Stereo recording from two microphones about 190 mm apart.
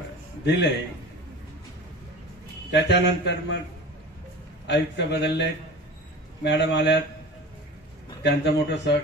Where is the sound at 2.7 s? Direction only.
65° left (ahead or behind).